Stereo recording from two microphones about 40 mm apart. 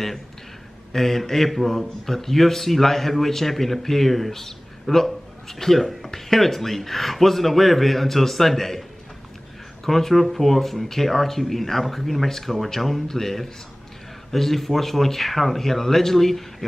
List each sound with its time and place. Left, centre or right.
0.9 s a man's voice: centre
9.8 s a man's voice: centre